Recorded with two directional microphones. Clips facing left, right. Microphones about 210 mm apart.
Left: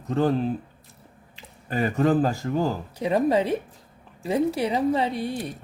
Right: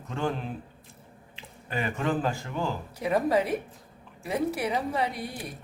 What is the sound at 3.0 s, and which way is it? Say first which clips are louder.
Speech: left 3 dB; 25° left (ahead or behind).